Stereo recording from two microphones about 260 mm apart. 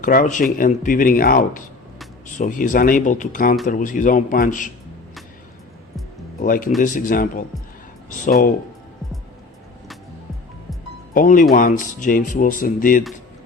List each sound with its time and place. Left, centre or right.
0.0 s speech: left
6.4 s speech: left
11.1 s speech: left